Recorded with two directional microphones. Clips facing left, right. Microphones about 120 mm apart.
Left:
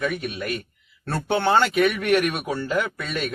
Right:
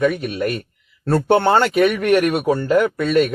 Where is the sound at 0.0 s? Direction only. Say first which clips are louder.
Right 8 dB; 50° right (ahead or behind).